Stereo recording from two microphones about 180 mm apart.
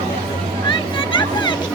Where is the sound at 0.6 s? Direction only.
25° left (ahead or behind).